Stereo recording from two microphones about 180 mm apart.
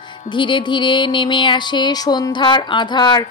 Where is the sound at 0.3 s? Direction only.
25° left (ahead or behind).